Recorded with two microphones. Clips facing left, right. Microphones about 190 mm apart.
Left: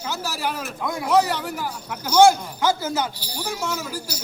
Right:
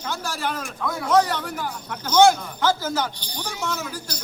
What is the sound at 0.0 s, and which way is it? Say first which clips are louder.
Speech: left 1 dB; 5° left (ahead or behind).